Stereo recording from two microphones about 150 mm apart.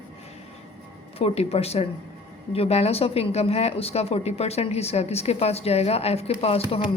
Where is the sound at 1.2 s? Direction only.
40° left (ahead or behind).